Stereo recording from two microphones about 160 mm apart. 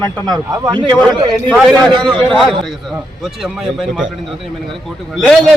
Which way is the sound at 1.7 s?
25° right (ahead or behind).